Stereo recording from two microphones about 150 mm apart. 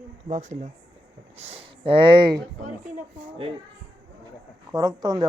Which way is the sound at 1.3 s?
40° right (ahead or behind).